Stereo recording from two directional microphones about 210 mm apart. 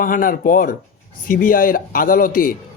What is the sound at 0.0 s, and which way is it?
A man's voice, 40° left (ahead or behind).